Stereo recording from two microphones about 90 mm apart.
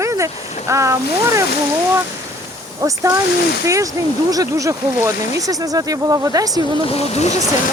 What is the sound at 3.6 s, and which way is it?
Speech, 35° right (ahead or behind).